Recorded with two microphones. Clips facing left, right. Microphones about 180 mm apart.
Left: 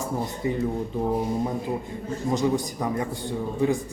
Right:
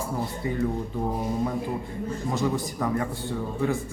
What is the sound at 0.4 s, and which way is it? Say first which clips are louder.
Speech: left 4 dB; 20° left (ahead or behind).